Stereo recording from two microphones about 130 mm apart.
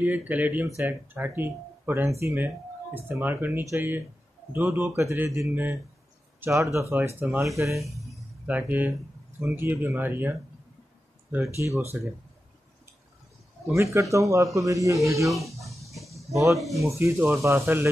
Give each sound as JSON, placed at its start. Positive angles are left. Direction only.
{"t": 0.0, "sound": "speech", "side_deg": -10}
{"t": 11.4, "sound": "speech", "side_deg": -20}
{"t": 13.9, "sound": "speech", "side_deg": -25}
{"t": 15.2, "sound": "chicken", "side_deg": 0}
{"t": 16.3, "sound": "speech", "side_deg": -25}